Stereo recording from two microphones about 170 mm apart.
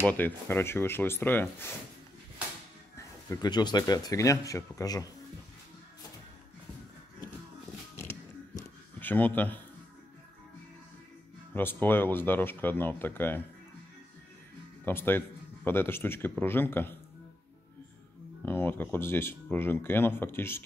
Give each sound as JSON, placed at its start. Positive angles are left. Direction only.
{"t": 0.1, "sound": "speech", "side_deg": 10}
{"t": 3.0, "sound": "speech", "side_deg": 20}
{"t": 9.0, "sound": "speech", "side_deg": 10}
{"t": 11.5, "sound": "speech", "side_deg": 10}
{"t": 14.9, "sound": "speech", "side_deg": 10}
{"t": 18.4, "sound": "speech", "side_deg": 10}